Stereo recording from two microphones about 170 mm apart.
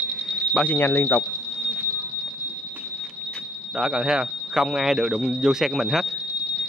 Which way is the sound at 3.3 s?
5° right (ahead or behind).